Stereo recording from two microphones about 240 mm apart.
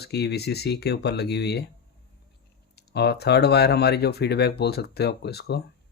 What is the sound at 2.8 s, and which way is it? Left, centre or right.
Speech, left.